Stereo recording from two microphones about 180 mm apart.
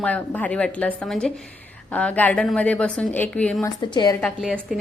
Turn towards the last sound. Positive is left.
turn(degrees=0)  # may be behind; listen again after turning